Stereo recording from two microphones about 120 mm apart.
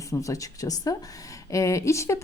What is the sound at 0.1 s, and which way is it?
Speech, 30° left (ahead or behind).